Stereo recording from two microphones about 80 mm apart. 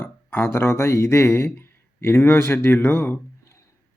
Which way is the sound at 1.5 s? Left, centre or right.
Left.